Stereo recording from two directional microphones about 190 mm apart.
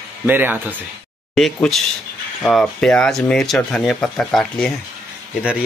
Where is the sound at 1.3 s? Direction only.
Centre (ahead or behind).